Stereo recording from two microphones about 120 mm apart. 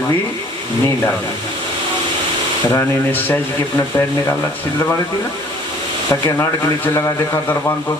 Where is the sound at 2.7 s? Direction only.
15° left (ahead or behind).